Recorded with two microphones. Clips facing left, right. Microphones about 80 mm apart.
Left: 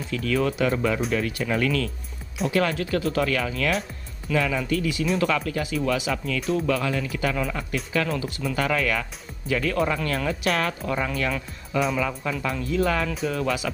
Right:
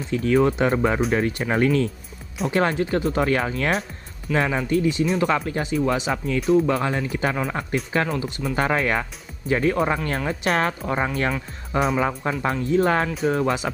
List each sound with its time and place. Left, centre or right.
0.1 s speech: right
8.2 s speech: centre
8.5 s speech: right